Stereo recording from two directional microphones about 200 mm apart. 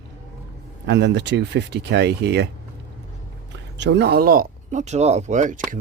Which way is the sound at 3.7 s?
60° right (ahead or behind).